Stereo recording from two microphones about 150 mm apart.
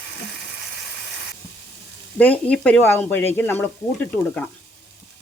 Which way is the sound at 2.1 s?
10° left (ahead or behind).